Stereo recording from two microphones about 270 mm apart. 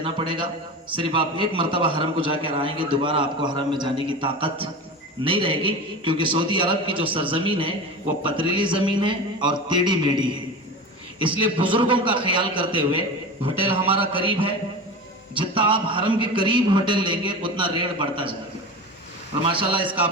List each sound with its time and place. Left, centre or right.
0.0 s a man's voice: centre
19.5 s a man's voice: centre